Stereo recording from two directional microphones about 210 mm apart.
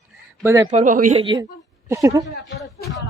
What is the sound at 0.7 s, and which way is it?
Speech, 35° right (ahead or behind).